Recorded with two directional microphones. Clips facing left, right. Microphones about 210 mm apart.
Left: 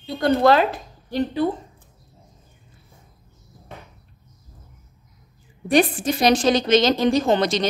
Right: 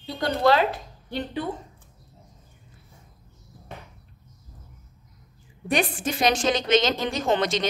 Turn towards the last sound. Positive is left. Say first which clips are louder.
# left 5 dB
turn(degrees=35)  # may be behind; listen again after turning